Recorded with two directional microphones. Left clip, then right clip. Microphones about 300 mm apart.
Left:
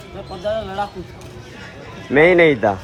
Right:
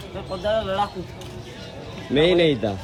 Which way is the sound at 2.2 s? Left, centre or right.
Centre.